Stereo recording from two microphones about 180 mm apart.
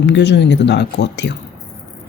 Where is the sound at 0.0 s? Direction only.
75° left (ahead or behind).